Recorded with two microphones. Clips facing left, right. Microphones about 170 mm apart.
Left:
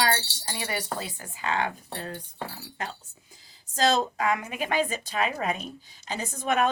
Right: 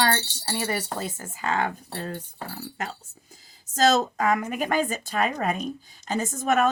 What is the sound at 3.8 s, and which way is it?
A woman's voice, 45° right (ahead or behind).